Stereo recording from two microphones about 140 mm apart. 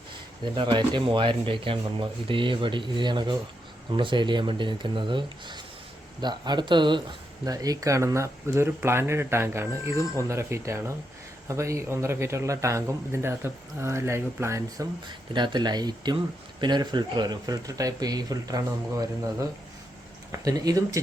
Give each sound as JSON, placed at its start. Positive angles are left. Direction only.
{"t": 0.5, "sound": "a man's voice", "side_deg": -35}
{"t": 15.3, "sound": "a man's voice", "side_deg": -35}